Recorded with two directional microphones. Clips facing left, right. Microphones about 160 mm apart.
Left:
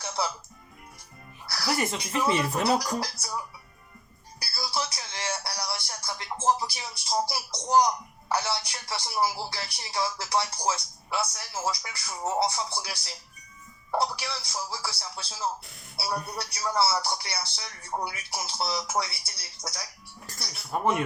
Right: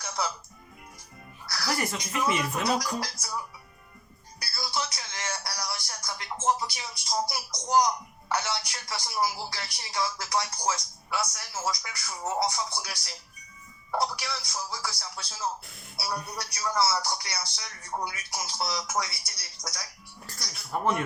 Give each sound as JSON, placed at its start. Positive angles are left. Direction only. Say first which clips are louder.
{"t": 1.5, "sound": "speech", "louder": "left 2 dB", "side_deg": 25}
{"t": 4.4, "sound": "music", "louder": "left 1 dB", "side_deg": 30}
{"t": 7.3, "sound": "speech", "louder": "left 2 dB", "side_deg": 25}
{"t": 14.2, "sound": "speech", "louder": "left 1 dB", "side_deg": 25}
{"t": 16.4, "sound": "speech", "louder": "even", "side_deg": 25}
{"t": 20.2, "sound": "music", "louder": "left 1 dB", "side_deg": 20}